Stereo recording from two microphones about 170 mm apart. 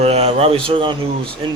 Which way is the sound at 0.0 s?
35° right (ahead or behind).